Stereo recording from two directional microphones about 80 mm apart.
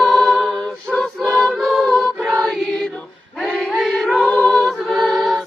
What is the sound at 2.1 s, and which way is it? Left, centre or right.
Choir, centre.